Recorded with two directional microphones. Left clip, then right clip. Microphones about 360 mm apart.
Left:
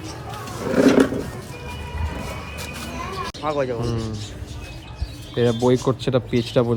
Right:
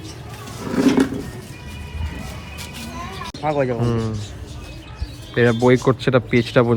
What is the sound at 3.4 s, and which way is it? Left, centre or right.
Speech, right.